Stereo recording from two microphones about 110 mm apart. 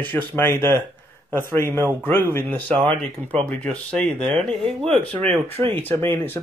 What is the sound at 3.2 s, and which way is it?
Speech, 20° right (ahead or behind).